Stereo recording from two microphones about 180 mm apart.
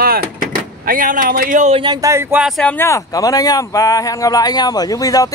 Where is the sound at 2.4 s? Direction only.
5° left (ahead or behind).